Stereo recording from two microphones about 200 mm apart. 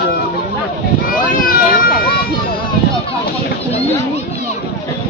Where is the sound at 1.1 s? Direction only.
45° left (ahead or behind).